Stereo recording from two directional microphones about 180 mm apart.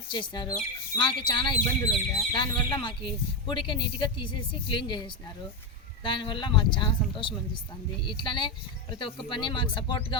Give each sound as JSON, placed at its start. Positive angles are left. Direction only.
{"t": 0.1, "sound": "speech", "side_deg": 25}